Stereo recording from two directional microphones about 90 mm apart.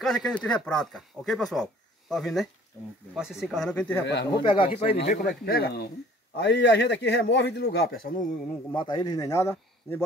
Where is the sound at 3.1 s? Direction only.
5° right (ahead or behind).